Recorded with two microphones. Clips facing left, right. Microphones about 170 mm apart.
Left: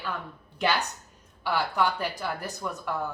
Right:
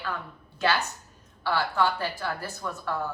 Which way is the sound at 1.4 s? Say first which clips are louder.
Right 1 dB; 15° left (ahead or behind).